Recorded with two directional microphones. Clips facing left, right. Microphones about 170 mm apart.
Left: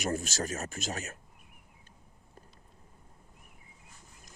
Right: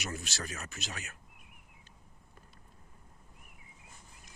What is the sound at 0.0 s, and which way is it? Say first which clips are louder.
Speech: left 8 dB; 45° left (ahead or behind).